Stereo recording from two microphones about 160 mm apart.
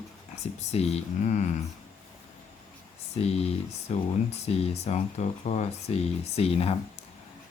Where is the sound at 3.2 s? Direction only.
40° left (ahead or behind).